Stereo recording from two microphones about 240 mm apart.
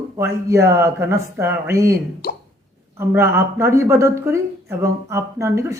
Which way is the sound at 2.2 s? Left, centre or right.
Left.